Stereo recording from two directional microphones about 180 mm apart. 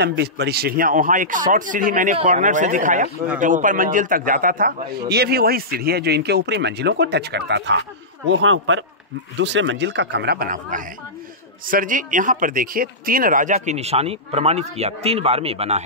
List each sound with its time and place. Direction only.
0.0 s a man's voice: 65° right (ahead or behind)
8.3 s a man's voice: 90° right
9.4 s speech: 80° right; by 15.8 s 35° right (ahead or behind)